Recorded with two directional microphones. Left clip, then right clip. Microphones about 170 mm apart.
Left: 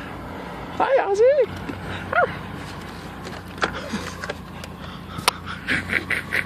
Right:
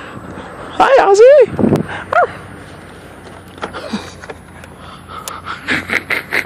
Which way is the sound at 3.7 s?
30° right (ahead or behind).